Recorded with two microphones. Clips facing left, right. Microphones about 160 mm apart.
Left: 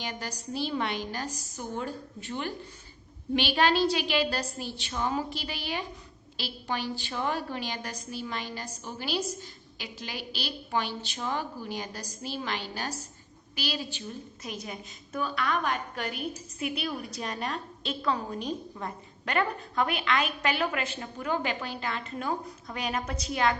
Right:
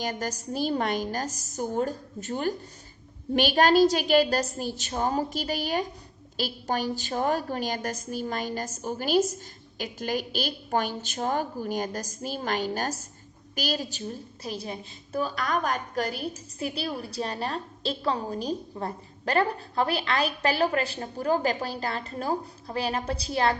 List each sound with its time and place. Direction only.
0.0 s a woman's voice: 45° right (ahead or behind)